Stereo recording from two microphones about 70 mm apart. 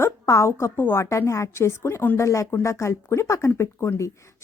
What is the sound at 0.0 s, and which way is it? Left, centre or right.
A woman's voice, left.